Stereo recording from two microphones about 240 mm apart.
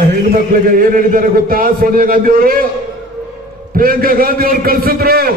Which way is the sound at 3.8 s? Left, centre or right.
Right.